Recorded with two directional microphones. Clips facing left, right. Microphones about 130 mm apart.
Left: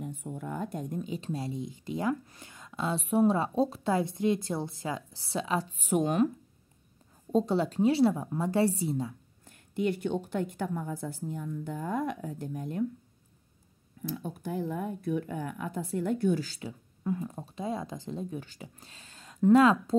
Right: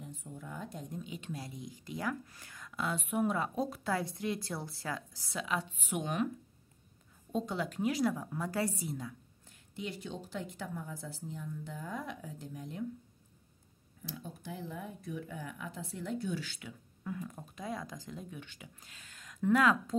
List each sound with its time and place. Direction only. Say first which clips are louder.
0.0 s a sound: left 9 dB; 60° left (ahead or behind)
1.0 s speech: left 8 dB; 35° left (ahead or behind)
7.3 s speech: left 9 dB; 35° left (ahead or behind)
9.4 s a woman's voice: left 12 dB; 55° left (ahead or behind)
14.0 s speech: left 9 dB; 55° left (ahead or behind)
16.4 s speech: left 7 dB; 35° left (ahead or behind)